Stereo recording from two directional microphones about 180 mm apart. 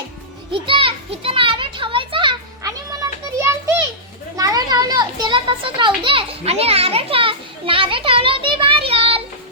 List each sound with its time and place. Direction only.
0.5 s children playing: 30° right (ahead or behind)
3.2 s children playing: 15° right (ahead or behind); by 9.2 s 30° right (ahead or behind)